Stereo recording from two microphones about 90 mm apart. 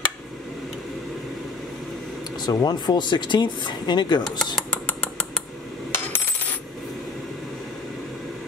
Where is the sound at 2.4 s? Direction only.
50° left (ahead or behind).